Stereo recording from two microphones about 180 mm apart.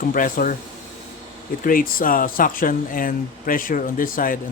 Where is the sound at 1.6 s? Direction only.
50° left (ahead or behind).